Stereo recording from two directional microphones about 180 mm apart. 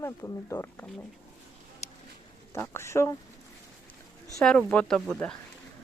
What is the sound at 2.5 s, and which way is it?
Speech, 15° left (ahead or behind).